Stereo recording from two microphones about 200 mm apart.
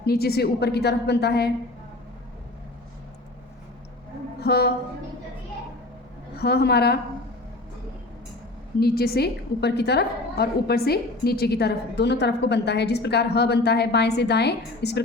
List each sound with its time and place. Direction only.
0.0 s a woman's voice: 50° left (ahead or behind)
4.4 s a woman's voice: 55° left (ahead or behind)
6.4 s a woman's voice: 55° left (ahead or behind)
8.8 s a woman's voice: 50° left (ahead or behind)